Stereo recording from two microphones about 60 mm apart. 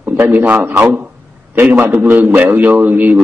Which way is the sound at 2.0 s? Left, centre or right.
Right.